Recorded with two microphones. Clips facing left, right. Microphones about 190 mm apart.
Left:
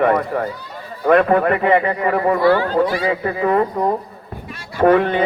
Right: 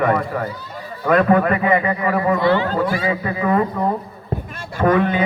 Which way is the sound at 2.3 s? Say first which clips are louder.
Left 4 dB; 20° right (ahead or behind).